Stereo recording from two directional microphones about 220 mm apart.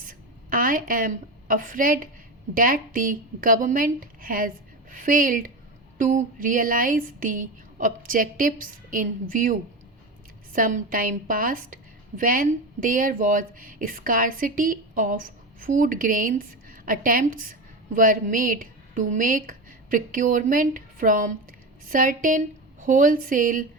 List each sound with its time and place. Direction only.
0.0 s a woman's voice: 40° right (ahead or behind)